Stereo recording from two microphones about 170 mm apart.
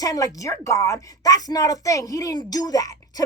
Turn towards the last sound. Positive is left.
turn(degrees=20)  # may be behind; listen again after turning